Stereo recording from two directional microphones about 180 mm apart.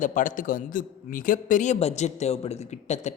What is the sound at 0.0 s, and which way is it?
A man's voice, 45° left (ahead or behind).